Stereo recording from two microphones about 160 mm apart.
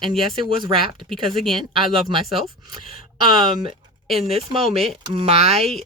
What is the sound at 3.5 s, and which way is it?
Speech, 30° right (ahead or behind).